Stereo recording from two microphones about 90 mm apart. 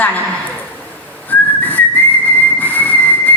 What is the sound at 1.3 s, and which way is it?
Whistling, 20° left (ahead or behind).